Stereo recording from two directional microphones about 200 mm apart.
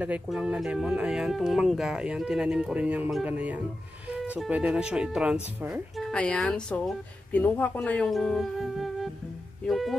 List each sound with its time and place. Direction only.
0.0 s speech: 5° right (ahead or behind)